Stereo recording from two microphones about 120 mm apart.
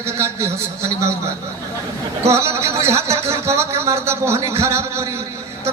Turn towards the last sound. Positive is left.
turn(degrees=-25)  # may be behind; listen again after turning